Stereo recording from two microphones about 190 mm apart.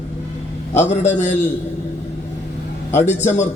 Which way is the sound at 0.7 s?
35° left (ahead or behind).